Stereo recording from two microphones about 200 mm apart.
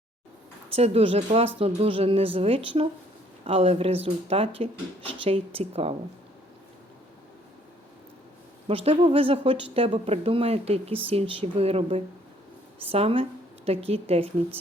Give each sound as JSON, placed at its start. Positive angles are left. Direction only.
{"t": 0.8, "sound": "speech", "side_deg": -30}
{"t": 8.6, "sound": "speech", "side_deg": -30}